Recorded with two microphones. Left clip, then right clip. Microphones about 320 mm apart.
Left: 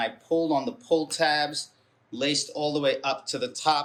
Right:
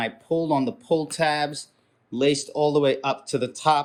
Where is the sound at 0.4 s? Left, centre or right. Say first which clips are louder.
Right 3 dB; centre.